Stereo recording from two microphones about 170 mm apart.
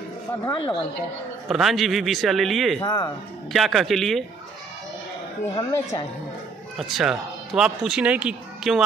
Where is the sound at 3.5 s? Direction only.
Centre (ahead or behind).